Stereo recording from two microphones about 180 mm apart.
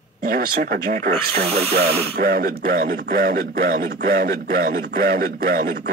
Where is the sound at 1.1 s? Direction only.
35° right (ahead or behind).